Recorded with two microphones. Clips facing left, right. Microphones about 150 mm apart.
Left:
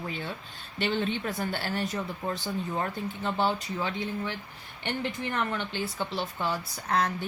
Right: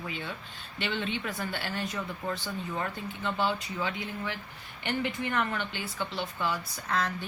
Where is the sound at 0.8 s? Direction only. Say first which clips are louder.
Left 4 dB; 40° left (ahead or behind).